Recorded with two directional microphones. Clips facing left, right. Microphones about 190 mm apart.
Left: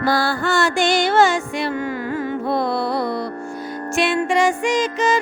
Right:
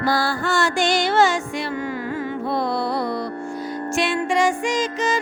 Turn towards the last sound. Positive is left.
turn(degrees=60)  # may be behind; listen again after turning